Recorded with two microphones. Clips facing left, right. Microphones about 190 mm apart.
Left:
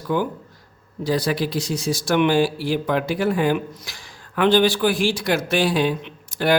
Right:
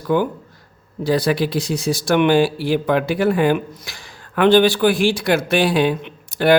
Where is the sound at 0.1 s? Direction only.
60° right (ahead or behind).